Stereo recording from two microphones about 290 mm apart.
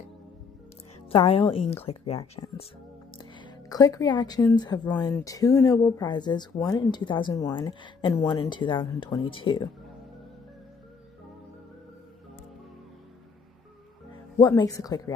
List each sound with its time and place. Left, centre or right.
1.1 s a woman's voice: centre
14.4 s speech: centre